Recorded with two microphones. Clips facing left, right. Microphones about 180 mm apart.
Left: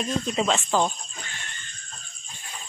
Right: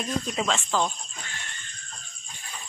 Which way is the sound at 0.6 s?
20° left (ahead or behind).